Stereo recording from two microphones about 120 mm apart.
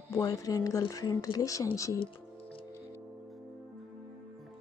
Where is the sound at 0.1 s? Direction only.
30° left (ahead or behind).